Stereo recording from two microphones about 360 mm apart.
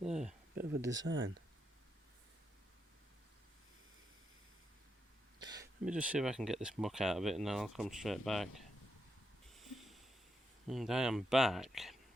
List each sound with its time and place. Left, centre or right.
0.0 s a sound: centre
0.7 s speech: centre
1.0 s speech: right
5.5 s speech: centre
9.5 s snort: centre
10.7 s speech: centre